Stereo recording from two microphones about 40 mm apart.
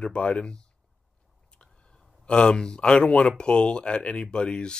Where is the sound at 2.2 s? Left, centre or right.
Left.